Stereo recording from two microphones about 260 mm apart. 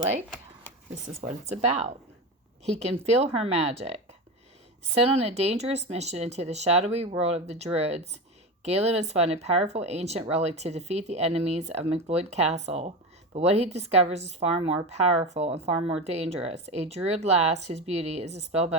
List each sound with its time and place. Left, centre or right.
1.0 s speech: right
3.3 s speech: right